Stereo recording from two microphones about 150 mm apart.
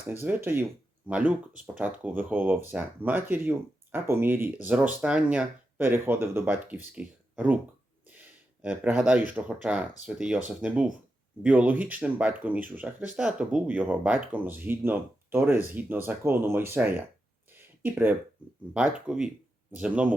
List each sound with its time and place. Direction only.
0.1 s speech: 15° right (ahead or behind)
8.6 s speech: 10° right (ahead or behind)
17.5 s a sound: 15° right (ahead or behind)
18.7 s speech: 5° right (ahead or behind)